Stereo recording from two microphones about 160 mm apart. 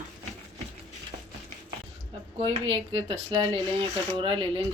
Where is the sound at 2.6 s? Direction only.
35° right (ahead or behind).